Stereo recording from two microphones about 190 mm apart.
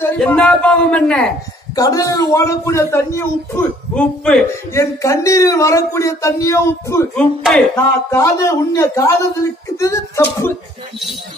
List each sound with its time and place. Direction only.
0.2 s speech: 5° left (ahead or behind)
1.8 s speech: 20° left (ahead or behind)
4.7 s speech: 15° left (ahead or behind)